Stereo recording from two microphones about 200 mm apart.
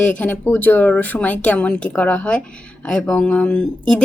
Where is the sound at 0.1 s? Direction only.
10° left (ahead or behind).